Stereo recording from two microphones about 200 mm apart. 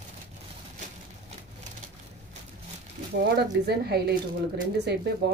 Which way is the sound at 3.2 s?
55° right (ahead or behind).